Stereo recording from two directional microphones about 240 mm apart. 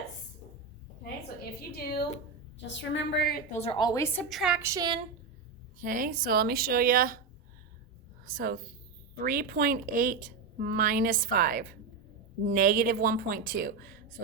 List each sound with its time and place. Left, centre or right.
1.7 s a woman's voice: left
3.6 s a woman's voice: centre
5.8 s a woman's voice: right
8.3 s a woman's voice: right